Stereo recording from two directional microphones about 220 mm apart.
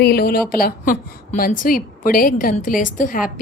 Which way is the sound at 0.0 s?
45° left (ahead or behind).